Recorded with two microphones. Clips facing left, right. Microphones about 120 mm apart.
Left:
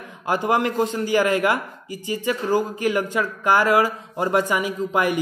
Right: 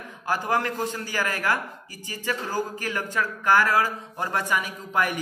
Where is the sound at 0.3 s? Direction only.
20° left (ahead or behind).